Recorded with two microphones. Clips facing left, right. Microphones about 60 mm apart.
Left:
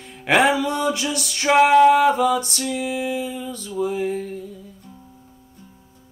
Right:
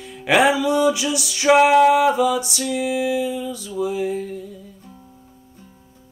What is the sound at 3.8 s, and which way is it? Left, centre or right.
Mantra, left.